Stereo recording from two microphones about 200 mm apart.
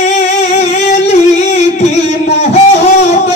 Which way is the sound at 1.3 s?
35° left (ahead or behind).